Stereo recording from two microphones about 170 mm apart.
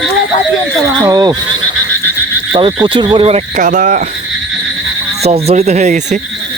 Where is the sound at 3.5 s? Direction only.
45° right (ahead or behind).